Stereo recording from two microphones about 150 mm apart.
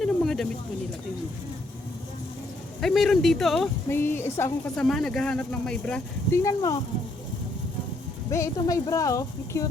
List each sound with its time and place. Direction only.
0.0 s a sound: centre (ahead or behind)
2.8 s speech: centre (ahead or behind)
3.8 s a woman's voice: 15° left (ahead or behind)
4.9 s speech: centre (ahead or behind)
6.3 s speech: 20° left (ahead or behind)
8.3 s speech: 20° left (ahead or behind)